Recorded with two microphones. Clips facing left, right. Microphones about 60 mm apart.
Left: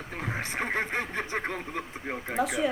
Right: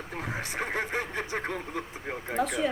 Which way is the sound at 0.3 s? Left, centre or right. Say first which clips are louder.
Left 2 dB; left.